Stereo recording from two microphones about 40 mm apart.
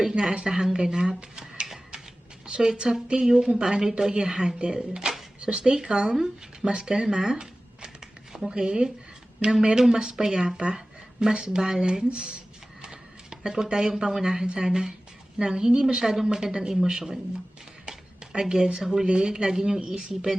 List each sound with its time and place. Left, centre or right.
0.0 s speech: centre
2.5 s speech: centre
6.1 s speech: centre
6.7 s speech: right
17.8 s a sound: centre
19.0 s speech: right